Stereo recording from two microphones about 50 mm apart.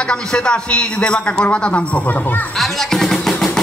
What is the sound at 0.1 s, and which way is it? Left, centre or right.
A man's voice, centre.